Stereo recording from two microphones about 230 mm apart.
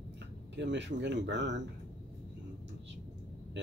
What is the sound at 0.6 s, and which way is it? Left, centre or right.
Speech, right.